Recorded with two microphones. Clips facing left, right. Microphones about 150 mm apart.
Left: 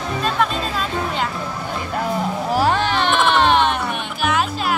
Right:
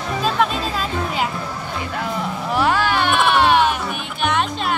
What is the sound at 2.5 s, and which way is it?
Music, 40° left (ahead or behind).